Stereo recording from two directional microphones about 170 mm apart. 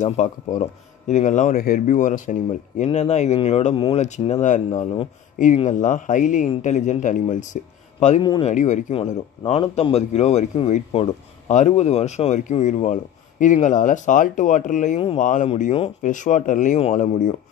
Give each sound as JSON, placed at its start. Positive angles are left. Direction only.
{"t": 0.0, "sound": "a man's voice", "side_deg": 45}
{"t": 8.2, "sound": "speech", "side_deg": 25}
{"t": 8.5, "sound": "speech", "side_deg": 45}
{"t": 9.4, "sound": "a man's voice", "side_deg": 35}